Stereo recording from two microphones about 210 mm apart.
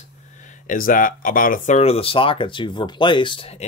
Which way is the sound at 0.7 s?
40° left (ahead or behind).